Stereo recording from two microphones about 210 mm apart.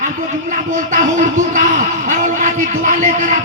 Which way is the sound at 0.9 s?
35° right (ahead or behind).